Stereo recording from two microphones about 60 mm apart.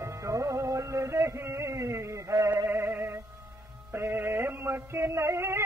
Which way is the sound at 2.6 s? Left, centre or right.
Right.